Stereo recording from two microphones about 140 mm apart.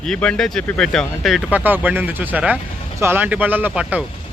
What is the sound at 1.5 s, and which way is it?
Speech, 15° right (ahead or behind).